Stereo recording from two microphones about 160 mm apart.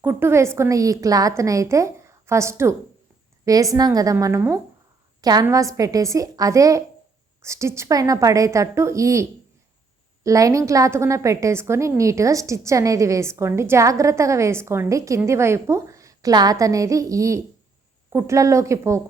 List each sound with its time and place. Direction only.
0.0 s a woman's voice: 15° right (ahead or behind)
10.2 s a woman's voice: 20° right (ahead or behind)